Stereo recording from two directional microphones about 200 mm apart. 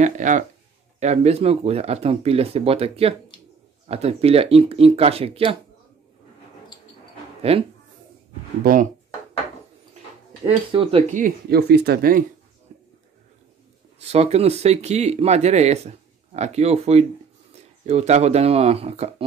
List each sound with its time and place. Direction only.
0.0 s speech: 40° right (ahead or behind)
7.5 s speech: 30° right (ahead or behind)
10.4 s speech: 25° right (ahead or behind); by 12.3 s 45° right (ahead or behind)
12.7 s a sound: 35° right (ahead or behind)
13.9 s speech: 30° right (ahead or behind)